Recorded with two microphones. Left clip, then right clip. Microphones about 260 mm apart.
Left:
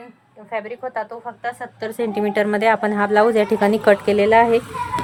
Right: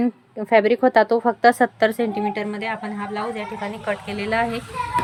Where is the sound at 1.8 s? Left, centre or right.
Centre.